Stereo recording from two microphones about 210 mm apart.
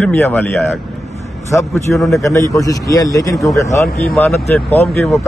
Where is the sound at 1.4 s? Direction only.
15° left (ahead or behind).